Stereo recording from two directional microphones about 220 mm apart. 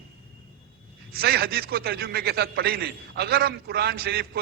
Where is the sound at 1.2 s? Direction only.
45° right (ahead or behind).